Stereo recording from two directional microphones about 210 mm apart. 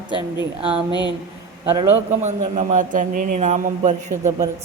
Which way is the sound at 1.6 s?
20° right (ahead or behind).